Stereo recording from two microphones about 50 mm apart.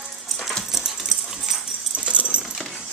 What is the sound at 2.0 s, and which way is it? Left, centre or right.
Keys jangling, right.